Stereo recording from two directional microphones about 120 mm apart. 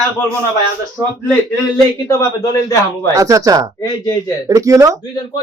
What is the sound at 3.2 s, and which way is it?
A man's voice, 30° right (ahead or behind).